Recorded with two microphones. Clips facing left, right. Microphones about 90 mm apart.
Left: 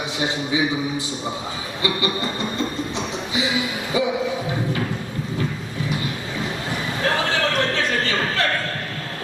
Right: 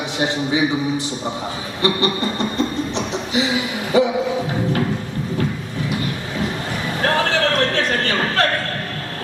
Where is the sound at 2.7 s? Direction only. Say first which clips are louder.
Right 4 dB; 65° right (ahead or behind).